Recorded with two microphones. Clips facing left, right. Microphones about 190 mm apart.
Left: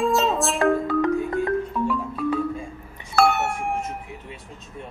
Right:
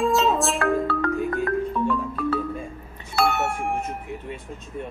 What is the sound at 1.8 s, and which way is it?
Marimba, 10° left (ahead or behind).